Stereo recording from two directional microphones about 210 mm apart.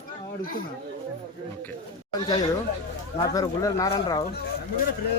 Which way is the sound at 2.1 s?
20° left (ahead or behind).